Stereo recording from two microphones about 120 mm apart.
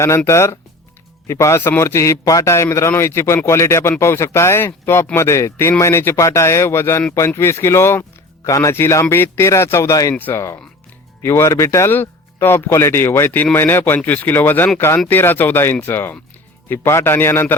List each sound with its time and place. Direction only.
0.3 s speech: 25° left (ahead or behind)